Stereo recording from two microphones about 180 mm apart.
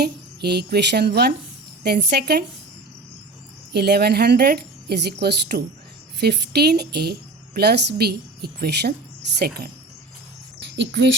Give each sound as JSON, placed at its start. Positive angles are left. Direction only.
{"t": 0.0, "sound": "a woman's voice", "side_deg": -65}
{"t": 3.7, "sound": "a woman's voice", "side_deg": -65}
{"t": 10.6, "sound": "a sound", "side_deg": -75}